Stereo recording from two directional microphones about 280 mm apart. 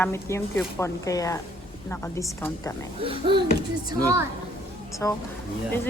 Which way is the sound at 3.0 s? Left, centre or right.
Centre.